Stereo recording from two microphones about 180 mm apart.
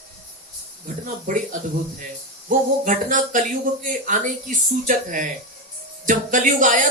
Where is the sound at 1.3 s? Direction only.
45° right (ahead or behind).